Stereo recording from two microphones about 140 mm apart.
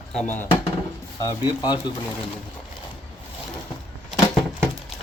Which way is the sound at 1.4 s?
30° left (ahead or behind).